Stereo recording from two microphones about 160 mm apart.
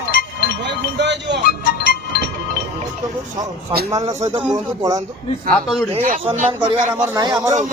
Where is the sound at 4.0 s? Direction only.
40° right (ahead or behind).